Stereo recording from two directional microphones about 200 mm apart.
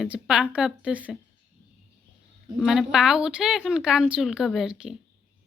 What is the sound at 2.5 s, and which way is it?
Speech, centre (ahead or behind).